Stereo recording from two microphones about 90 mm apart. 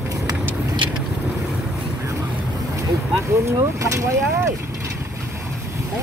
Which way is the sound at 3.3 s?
35° right (ahead or behind).